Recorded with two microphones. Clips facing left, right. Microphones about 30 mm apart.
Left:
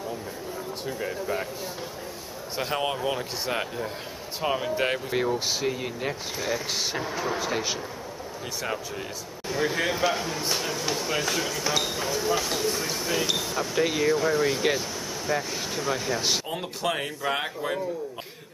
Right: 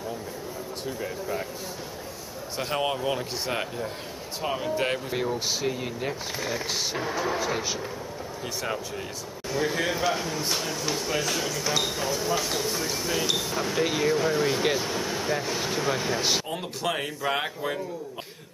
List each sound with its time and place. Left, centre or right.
0.8 s speech: centre
2.6 s speech: centre
9.5 s speech: centre
14.8 s vehicle: right
15.2 s speech: centre